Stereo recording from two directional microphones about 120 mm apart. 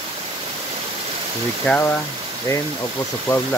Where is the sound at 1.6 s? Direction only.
10° left (ahead or behind).